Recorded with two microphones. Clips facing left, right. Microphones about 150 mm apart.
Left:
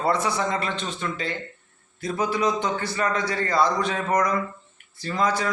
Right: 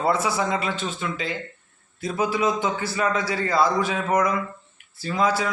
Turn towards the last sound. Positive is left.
turn(degrees=-5)  # may be behind; listen again after turning